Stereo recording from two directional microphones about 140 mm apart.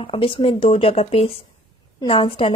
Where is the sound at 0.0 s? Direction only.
40° left (ahead or behind).